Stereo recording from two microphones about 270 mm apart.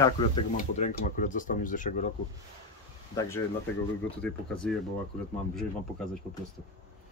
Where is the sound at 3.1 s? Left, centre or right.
Centre.